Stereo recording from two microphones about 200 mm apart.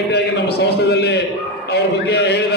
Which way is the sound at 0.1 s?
55° left (ahead or behind).